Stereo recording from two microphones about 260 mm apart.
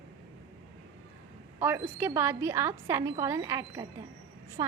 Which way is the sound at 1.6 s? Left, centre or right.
Centre.